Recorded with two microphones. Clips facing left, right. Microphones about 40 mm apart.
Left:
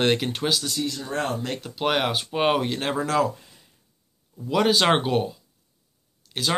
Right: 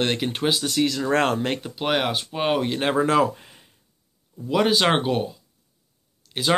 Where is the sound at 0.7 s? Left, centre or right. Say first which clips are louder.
Right 7 dB; right.